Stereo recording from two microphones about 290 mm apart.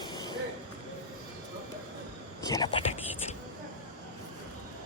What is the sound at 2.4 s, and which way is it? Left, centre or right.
Whispering, centre.